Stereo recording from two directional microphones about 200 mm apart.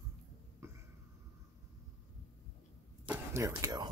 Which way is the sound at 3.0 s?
15° right (ahead or behind).